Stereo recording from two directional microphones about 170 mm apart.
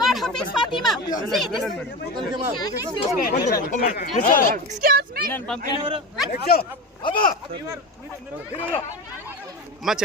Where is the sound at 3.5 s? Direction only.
50° left (ahead or behind).